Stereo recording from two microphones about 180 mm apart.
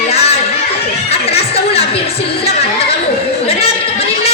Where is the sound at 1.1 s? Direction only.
35° left (ahead or behind).